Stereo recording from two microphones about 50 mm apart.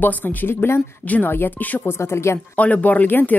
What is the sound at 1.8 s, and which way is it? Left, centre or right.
Speech, left.